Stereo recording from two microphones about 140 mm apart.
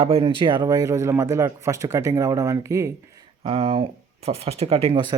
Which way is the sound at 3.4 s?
40° right (ahead or behind).